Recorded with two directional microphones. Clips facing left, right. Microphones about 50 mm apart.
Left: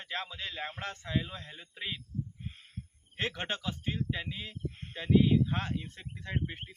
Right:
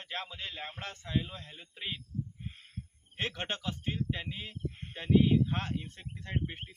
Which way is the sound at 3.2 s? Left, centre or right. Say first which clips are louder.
Left 1 dB; centre.